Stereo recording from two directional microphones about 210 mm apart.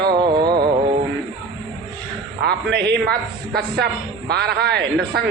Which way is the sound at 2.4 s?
50° right (ahead or behind).